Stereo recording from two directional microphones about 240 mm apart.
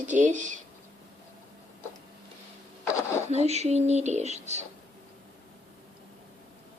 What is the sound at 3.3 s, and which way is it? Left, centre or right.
Speech, right.